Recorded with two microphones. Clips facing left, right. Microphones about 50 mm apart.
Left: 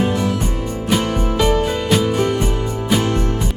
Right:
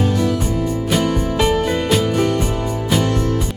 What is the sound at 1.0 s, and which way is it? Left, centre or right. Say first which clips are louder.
Music: right 2 dB; left.